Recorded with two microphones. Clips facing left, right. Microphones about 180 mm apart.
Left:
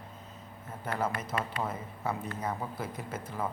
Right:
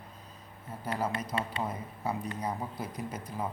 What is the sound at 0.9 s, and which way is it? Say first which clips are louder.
Speech: even; 15° right (ahead or behind).